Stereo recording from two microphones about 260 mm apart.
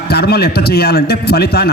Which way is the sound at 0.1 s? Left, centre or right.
Left.